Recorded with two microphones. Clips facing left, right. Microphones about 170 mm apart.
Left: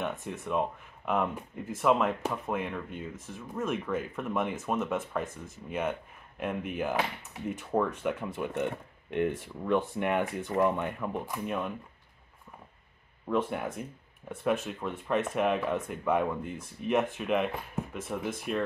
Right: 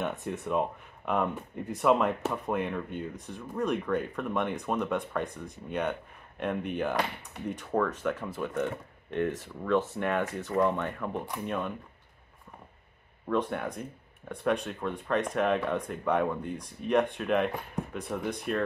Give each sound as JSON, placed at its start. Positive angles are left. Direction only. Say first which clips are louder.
{"t": 0.0, "sound": "speech", "louder": "right 2 dB", "side_deg": 0}
{"t": 13.3, "sound": "speech", "louder": "even", "side_deg": 5}